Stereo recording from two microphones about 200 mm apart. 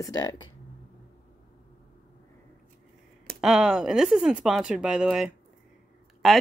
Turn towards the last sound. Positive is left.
turn(degrees=0)  # may be behind; listen again after turning